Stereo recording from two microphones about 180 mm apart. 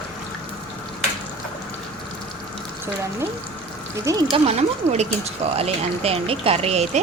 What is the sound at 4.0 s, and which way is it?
Speech, 20° right (ahead or behind).